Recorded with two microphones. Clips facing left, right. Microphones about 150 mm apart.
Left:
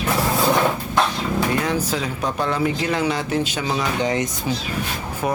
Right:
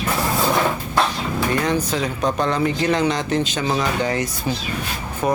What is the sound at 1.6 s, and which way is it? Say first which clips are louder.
Speech: right 2 dB; 5° left (ahead or behind).